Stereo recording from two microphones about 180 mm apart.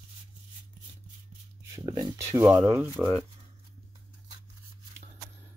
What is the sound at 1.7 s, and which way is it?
Speech, 15° right (ahead or behind).